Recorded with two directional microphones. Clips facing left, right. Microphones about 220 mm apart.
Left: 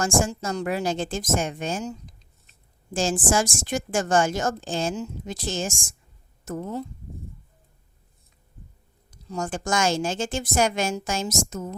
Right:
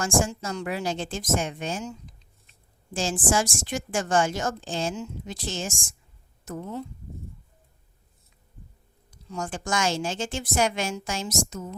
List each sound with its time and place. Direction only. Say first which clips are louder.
0.0 s a woman's voice: left 2 dB; 45° left (ahead or behind)
9.0 s a woman's voice: left 3 dB; 40° left (ahead or behind)